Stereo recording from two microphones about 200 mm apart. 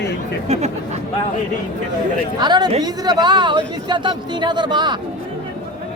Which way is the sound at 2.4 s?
20° right (ahead or behind).